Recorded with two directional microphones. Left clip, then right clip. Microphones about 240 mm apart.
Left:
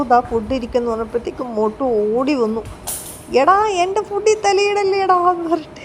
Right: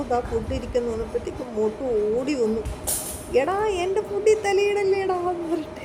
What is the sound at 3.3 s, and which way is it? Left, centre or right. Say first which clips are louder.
A woman's voice: left 9 dB; centre.